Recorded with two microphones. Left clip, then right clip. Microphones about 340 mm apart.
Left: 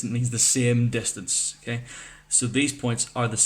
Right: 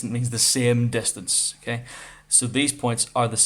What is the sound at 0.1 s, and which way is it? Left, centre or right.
Speech, centre.